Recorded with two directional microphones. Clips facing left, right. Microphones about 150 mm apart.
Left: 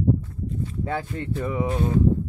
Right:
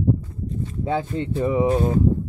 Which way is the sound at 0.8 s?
20° right (ahead or behind).